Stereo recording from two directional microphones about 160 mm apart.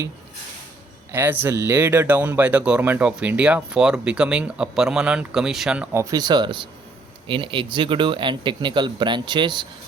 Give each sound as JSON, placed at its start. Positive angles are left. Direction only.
{"t": 1.1, "sound": "speech", "side_deg": -10}